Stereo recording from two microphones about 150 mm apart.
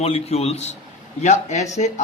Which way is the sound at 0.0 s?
45° left (ahead or behind).